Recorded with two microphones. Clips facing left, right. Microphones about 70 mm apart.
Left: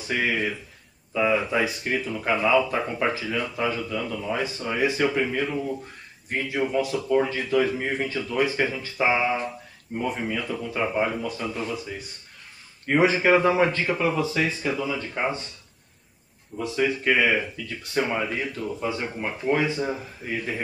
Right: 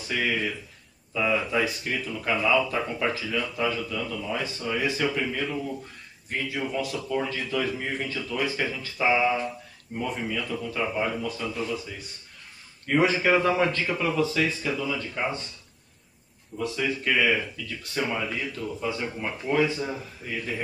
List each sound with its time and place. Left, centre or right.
0.1 s speech: centre
16.5 s speech: centre